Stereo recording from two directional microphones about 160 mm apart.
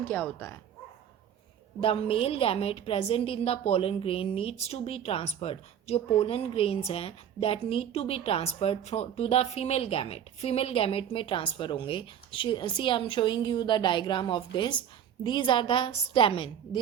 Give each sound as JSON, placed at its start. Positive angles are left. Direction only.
{"t": 0.0, "sound": "speech", "side_deg": 10}
{"t": 1.8, "sound": "a woman's voice", "side_deg": 35}